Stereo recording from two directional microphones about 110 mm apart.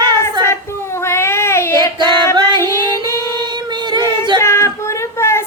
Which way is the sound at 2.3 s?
40° right (ahead or behind).